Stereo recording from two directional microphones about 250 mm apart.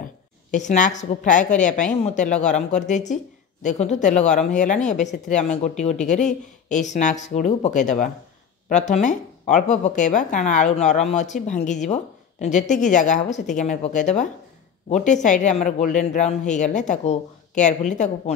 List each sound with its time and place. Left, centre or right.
0.5 s speech: left